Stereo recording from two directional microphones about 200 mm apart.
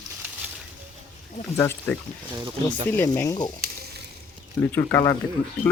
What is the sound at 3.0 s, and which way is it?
Speech, 15° left (ahead or behind).